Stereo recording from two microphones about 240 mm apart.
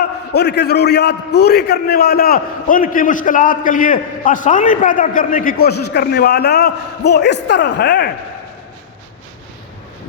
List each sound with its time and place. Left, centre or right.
0.3 s a man's voice: left